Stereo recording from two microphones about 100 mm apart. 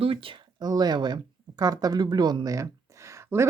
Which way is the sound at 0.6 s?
40° right (ahead or behind).